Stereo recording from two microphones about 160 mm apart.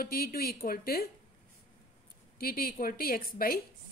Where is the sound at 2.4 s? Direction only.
65° left (ahead or behind).